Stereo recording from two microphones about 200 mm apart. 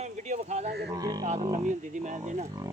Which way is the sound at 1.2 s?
35° right (ahead or behind).